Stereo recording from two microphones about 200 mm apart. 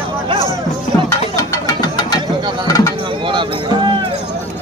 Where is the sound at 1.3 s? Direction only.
20° left (ahead or behind).